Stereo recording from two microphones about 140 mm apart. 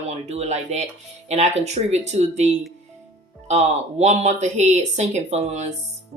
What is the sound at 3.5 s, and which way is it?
Speech, 50° right (ahead or behind).